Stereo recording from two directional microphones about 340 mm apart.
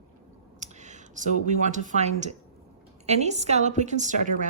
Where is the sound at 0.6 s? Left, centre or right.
Right.